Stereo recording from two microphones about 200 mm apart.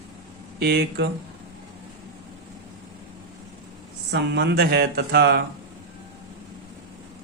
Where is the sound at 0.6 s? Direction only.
55° right (ahead or behind).